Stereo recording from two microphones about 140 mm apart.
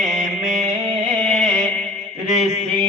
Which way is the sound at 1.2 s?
5° left (ahead or behind).